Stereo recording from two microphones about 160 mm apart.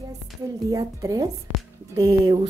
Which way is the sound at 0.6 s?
20° right (ahead or behind).